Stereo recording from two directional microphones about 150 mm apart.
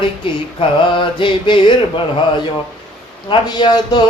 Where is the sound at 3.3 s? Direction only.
30° left (ahead or behind).